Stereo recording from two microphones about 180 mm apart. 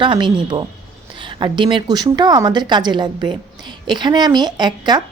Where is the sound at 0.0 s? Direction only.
25° right (ahead or behind).